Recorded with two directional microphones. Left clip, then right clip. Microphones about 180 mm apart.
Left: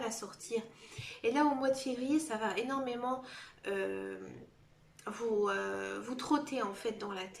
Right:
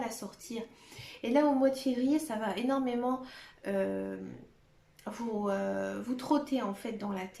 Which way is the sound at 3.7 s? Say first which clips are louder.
Right 5 dB; 25° right (ahead or behind).